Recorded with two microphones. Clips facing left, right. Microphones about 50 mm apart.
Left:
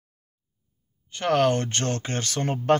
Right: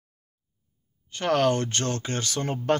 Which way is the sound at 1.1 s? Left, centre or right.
Left.